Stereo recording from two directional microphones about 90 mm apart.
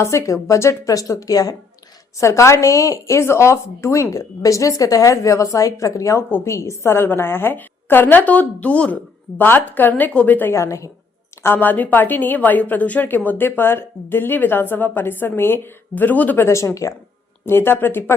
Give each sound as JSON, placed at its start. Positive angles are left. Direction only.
{"t": 0.0, "sound": "a woman's voice", "side_deg": 35}
{"t": 10.5, "sound": "speech", "side_deg": 35}
{"t": 11.4, "sound": "a woman's voice", "side_deg": 20}
{"t": 16.5, "sound": "a woman's voice", "side_deg": 35}